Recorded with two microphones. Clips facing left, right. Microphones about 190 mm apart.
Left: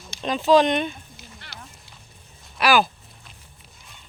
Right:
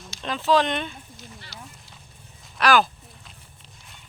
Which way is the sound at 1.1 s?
60° left (ahead or behind).